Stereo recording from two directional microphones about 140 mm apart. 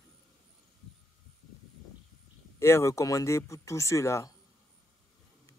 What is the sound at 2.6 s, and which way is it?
Speech, 20° left (ahead or behind).